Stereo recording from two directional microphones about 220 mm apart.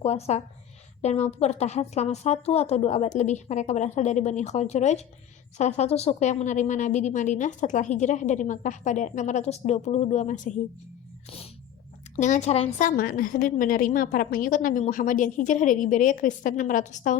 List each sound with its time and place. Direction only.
0.0 s a woman's voice: 30° left (ahead or behind)
12.1 s a woman's voice: 30° left (ahead or behind)
13.0 s a woman's voice: 40° left (ahead or behind)